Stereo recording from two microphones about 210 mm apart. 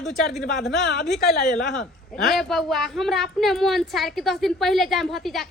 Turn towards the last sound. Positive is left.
turn(degrees=0)  # may be behind; listen again after turning